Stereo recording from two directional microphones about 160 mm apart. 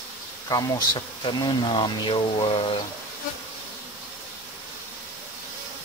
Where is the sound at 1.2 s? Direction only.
30° left (ahead or behind).